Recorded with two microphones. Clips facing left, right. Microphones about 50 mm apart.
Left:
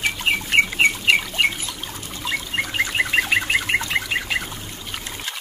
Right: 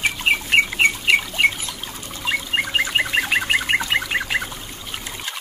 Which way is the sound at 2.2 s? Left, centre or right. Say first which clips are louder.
Right 3 dB; centre.